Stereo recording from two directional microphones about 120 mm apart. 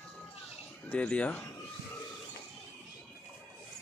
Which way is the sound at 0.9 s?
10° left (ahead or behind).